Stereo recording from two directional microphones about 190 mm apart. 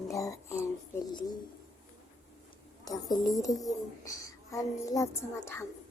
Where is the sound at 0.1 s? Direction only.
15° left (ahead or behind).